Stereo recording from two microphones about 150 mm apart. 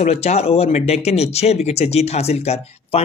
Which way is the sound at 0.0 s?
45° left (ahead or behind).